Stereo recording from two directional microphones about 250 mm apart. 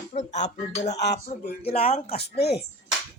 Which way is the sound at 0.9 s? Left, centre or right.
Left.